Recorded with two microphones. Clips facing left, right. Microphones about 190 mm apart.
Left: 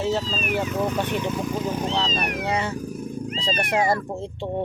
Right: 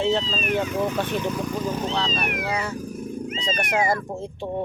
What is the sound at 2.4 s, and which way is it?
Speech, 25° left (ahead or behind).